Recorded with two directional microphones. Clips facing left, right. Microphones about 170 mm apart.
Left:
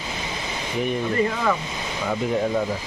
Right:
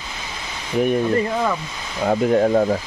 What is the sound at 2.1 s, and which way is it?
Speech, 50° right (ahead or behind).